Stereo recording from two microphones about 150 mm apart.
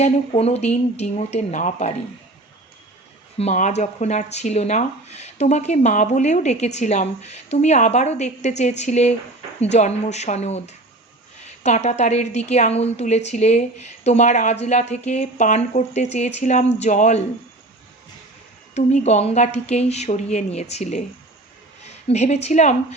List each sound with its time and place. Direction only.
0.0 s speech: 45° left (ahead or behind)
3.3 s speech: 50° left (ahead or behind)
18.7 s a woman's voice: 50° left (ahead or behind)